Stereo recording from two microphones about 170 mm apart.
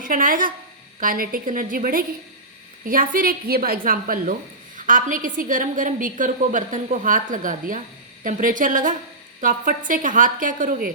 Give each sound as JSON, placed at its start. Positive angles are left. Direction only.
{"t": 0.0, "sound": "a woman's voice", "side_deg": -55}